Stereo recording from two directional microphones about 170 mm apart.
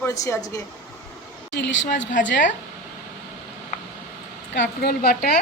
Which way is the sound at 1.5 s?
90° left.